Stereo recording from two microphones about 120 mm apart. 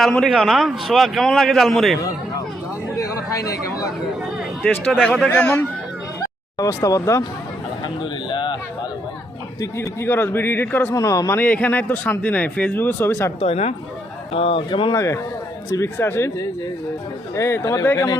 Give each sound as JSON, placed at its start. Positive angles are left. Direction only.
{"t": 0.1, "sound": "a man's voice", "side_deg": 5}
{"t": 3.0, "sound": "speech", "side_deg": 30}
{"t": 4.6, "sound": "a man's voice", "side_deg": 0}
{"t": 5.3, "sound": "speech", "side_deg": 15}
{"t": 6.6, "sound": "a man's voice", "side_deg": 30}
{"t": 8.3, "sound": "a sound", "side_deg": 40}
{"t": 9.6, "sound": "a man's voice", "side_deg": 25}
{"t": 10.9, "sound": "a man's voice", "side_deg": 30}
{"t": 11.3, "sound": "speech", "side_deg": 15}
{"t": 13.4, "sound": "speech", "side_deg": 60}
{"t": 14.9, "sound": "a man's voice", "side_deg": 25}